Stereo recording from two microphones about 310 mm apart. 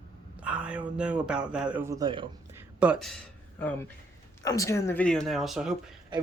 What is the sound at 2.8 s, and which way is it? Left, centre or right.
Speech, centre.